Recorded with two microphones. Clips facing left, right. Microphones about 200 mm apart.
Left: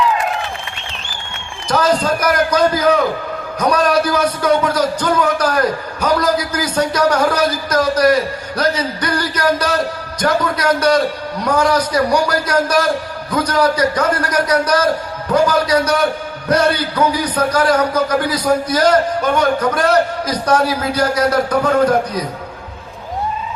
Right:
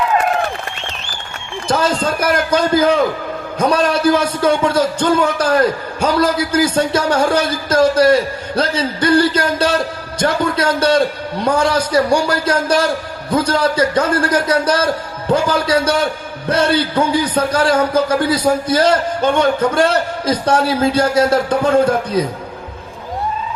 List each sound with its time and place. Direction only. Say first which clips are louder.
1.6 s a man's voice: left 1 dB; 30° right (ahead or behind)